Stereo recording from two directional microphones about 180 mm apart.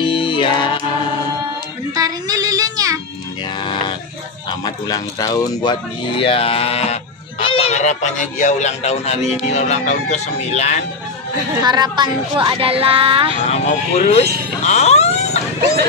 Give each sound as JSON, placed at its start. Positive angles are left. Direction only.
{"t": 0.0, "sound": "music", "side_deg": 25}
{"t": 2.0, "sound": "music", "side_deg": -20}
{"t": 4.5, "sound": "speech", "side_deg": 20}
{"t": 11.6, "sound": "speech", "side_deg": -25}
{"t": 13.5, "sound": "speech", "side_deg": 35}
{"t": 14.6, "sound": "a sound", "side_deg": 35}